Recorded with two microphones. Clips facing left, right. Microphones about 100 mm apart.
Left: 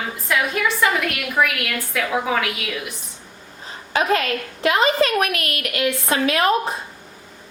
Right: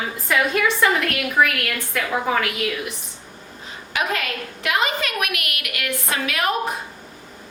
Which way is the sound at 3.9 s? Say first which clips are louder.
Left 5 dB; 35° left (ahead or behind).